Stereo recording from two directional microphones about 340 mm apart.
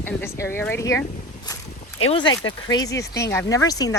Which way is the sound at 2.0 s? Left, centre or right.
Centre.